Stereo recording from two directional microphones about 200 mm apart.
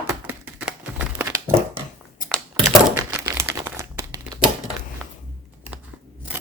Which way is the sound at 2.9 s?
15° right (ahead or behind).